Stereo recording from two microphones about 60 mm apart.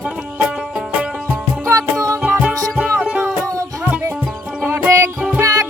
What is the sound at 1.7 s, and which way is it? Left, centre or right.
Music, right.